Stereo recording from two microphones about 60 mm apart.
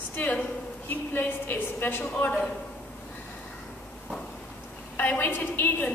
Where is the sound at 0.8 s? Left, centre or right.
Left.